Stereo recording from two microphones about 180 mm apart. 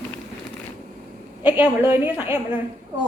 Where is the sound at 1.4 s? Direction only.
10° right (ahead or behind).